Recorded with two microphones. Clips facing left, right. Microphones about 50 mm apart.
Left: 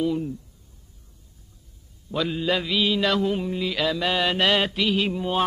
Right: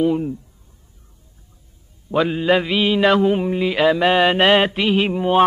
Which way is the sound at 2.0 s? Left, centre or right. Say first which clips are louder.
Right 7 dB; right.